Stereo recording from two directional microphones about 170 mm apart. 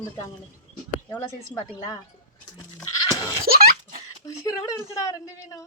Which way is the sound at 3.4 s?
60° right (ahead or behind).